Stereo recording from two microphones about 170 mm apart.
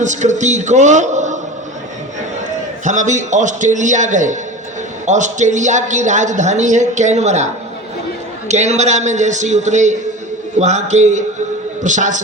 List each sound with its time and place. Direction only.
0.0 s a woman's voice: 45° right (ahead or behind)
2.8 s a woman's voice: 45° right (ahead or behind)